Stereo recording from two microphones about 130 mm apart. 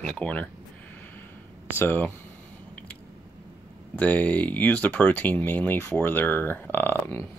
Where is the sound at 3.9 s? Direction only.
10° left (ahead or behind).